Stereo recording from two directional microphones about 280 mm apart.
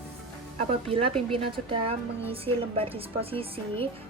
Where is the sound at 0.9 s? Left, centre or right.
Centre.